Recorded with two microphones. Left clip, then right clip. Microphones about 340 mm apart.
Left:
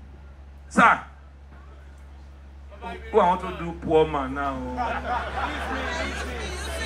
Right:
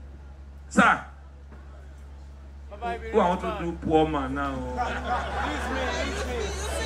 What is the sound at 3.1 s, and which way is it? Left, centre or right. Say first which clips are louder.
A man's voice: left 4 dB; centre.